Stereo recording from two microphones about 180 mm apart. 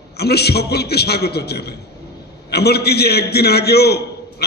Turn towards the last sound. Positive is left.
turn(degrees=65)  # may be behind; listen again after turning